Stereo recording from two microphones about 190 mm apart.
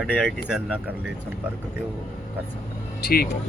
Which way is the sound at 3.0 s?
50° left (ahead or behind).